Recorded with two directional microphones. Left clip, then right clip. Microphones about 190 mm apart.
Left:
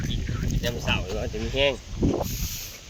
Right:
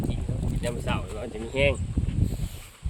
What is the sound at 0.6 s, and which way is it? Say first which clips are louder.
Speech: left 4 dB; 25° right (ahead or behind).